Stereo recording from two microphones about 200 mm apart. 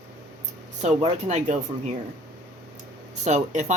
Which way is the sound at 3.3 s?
35° right (ahead or behind).